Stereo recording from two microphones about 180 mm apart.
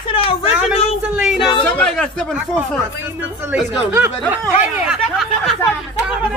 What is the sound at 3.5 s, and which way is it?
Speech, 10° right (ahead or behind).